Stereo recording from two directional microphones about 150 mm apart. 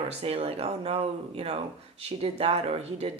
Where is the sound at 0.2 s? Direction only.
40° right (ahead or behind).